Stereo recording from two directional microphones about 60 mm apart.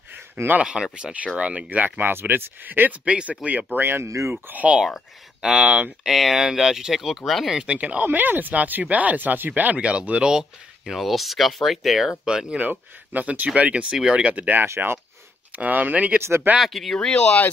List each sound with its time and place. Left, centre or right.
0.4 s speech: right
0.9 s speech: centre
4.0 s speech: right
4.5 s speech: right
6.0 s speech: centre
7.5 s speech: centre
10.9 s speech: centre
12.4 s speech: right
16.2 s speech: right
16.5 s speech: centre
17.2 s speech: centre